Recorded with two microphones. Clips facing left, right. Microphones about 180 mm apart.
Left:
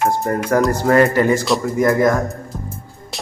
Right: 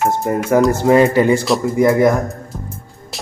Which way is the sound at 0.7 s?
20° right (ahead or behind).